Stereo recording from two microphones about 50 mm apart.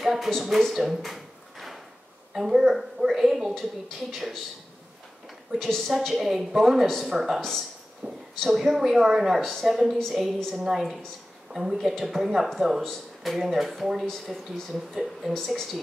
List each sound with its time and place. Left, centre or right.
0.0 s a sound: centre
2.3 s a woman's voice: centre
5.8 s a woman's voice: centre
7.3 s a woman's voice: centre
8.0 s speech: right
8.4 s a woman's voice: centre
9.4 s a woman's voice: centre
9.9 s a woman's voice: centre
10.2 s a woman's voice: centre